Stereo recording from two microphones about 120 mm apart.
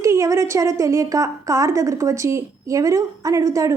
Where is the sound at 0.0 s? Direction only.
25° right (ahead or behind).